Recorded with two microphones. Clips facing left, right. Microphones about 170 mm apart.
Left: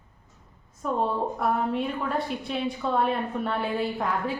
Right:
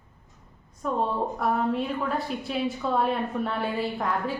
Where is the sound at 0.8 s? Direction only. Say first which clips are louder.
Even; centre (ahead or behind).